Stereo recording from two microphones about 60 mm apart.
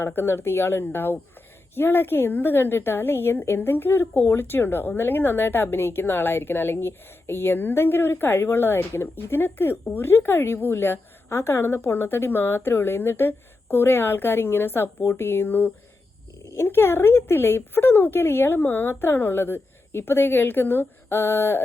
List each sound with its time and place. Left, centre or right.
0.1 s a woman's voice: left